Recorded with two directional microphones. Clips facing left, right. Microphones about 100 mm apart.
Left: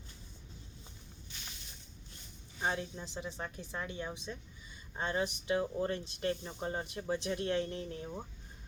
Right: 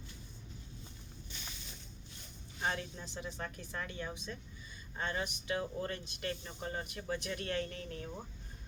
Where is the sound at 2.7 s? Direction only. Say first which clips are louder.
Left 2 dB; 15° left (ahead or behind).